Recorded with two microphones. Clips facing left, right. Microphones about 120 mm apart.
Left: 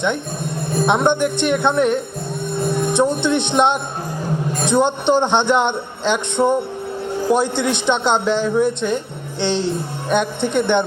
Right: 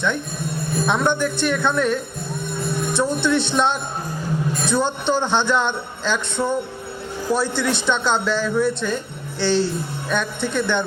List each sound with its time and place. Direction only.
0.9 s speech: 20° left (ahead or behind)